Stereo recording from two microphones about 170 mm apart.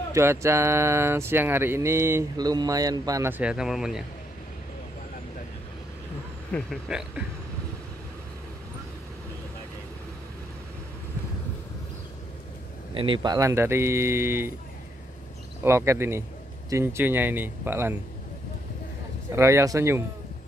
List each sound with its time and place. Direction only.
0.1 s speech: 15° right (ahead or behind)
6.5 s speech: centre (ahead or behind)
12.9 s speech: 30° right (ahead or behind); by 14.5 s 15° right (ahead or behind)
15.6 s speech: 15° right (ahead or behind)
19.3 s speech: 15° right (ahead or behind)